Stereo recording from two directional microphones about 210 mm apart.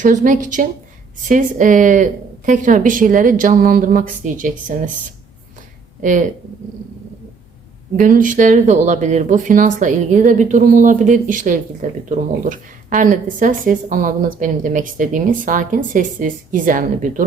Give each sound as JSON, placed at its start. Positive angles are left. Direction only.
{"t": 0.0, "sound": "speech", "side_deg": -40}
{"t": 6.0, "sound": "speech", "side_deg": -40}
{"t": 7.9, "sound": "speech", "side_deg": -40}